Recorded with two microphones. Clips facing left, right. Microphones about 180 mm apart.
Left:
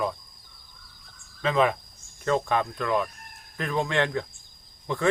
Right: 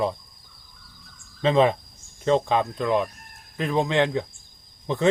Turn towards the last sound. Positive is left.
turn(degrees=-20)  # may be behind; listen again after turning